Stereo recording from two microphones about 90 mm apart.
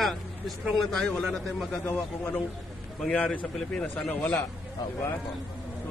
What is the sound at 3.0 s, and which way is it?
Speech, 15° left (ahead or behind).